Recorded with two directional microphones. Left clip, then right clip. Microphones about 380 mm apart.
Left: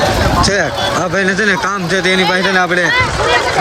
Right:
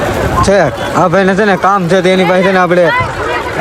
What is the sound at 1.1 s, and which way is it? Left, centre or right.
Speech, centre.